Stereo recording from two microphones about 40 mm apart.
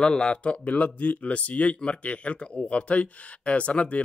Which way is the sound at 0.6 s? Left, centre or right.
Left.